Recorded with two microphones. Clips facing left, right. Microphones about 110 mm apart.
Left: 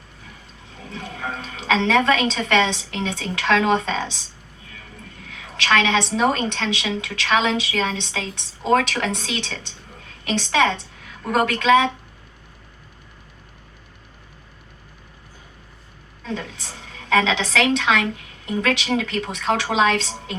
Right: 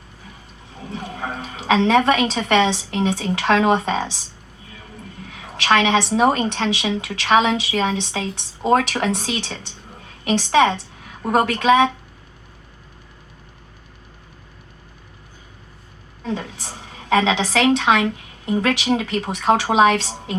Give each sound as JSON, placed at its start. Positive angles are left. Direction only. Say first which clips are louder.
{"t": 0.9, "sound": "a woman's voice", "louder": "right 2 dB", "side_deg": -15}
{"t": 5.3, "sound": "a sound", "louder": "right 2 dB", "side_deg": -20}
{"t": 6.1, "sound": "a woman's voice", "louder": "right 3 dB", "side_deg": -15}
{"t": 16.2, "sound": "a woman's voice", "louder": "right 3 dB", "side_deg": -20}